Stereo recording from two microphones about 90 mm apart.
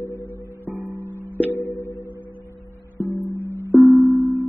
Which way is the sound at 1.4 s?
30° left (ahead or behind).